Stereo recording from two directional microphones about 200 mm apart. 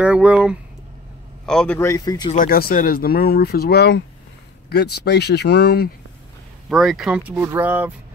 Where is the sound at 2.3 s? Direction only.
45° left (ahead or behind).